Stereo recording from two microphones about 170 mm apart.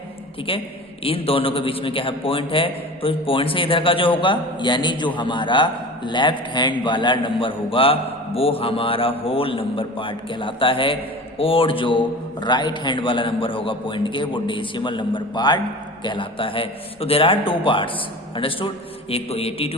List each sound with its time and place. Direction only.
1.0 s a man's voice: 35° left (ahead or behind)